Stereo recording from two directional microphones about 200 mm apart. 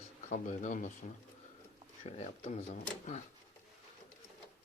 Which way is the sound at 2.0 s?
30° left (ahead or behind).